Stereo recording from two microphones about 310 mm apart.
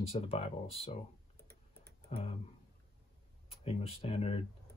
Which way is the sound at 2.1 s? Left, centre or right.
Centre.